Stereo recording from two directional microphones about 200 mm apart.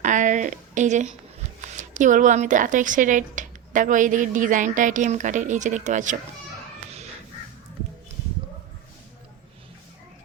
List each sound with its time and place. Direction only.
0.0 s a sound: 40° right (ahead or behind)
1.6 s speech: 40° right (ahead or behind)
6.9 s crow: 30° right (ahead or behind)